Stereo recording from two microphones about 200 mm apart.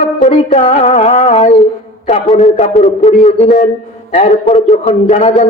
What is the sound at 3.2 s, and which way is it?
A man's voice, 35° left (ahead or behind).